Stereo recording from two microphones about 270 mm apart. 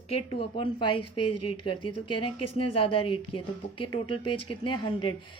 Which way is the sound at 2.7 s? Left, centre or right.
Centre.